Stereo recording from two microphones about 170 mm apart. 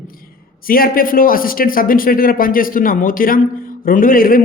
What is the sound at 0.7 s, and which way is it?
A man's voice, 60° left (ahead or behind).